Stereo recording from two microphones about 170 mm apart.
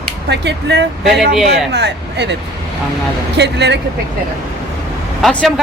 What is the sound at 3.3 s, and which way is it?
Speech, 90° right.